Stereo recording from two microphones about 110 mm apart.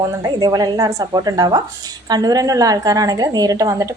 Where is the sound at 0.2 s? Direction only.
40° right (ahead or behind).